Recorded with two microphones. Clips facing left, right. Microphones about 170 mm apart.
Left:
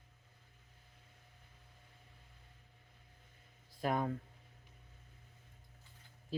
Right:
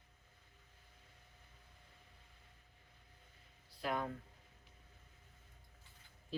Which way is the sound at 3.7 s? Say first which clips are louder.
Left 4 dB; 45° left (ahead or behind).